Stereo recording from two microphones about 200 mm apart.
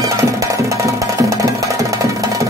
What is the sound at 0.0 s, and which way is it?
Music, 15° right (ahead or behind).